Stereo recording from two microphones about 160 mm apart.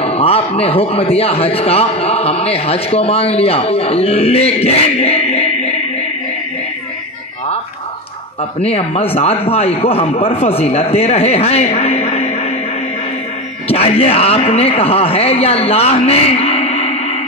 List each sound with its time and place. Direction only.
0.0 s a man's voice: 40° left (ahead or behind)
8.5 s a man's voice: 40° left (ahead or behind)
13.7 s a man's voice: 40° left (ahead or behind)
16.1 s a sound: 40° left (ahead or behind)